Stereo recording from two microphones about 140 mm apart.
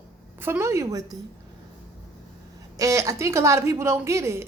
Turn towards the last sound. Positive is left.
turn(degrees=-20)  # may be behind; listen again after turning